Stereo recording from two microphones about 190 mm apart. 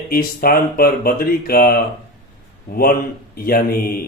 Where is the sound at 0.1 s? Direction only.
50° left (ahead or behind).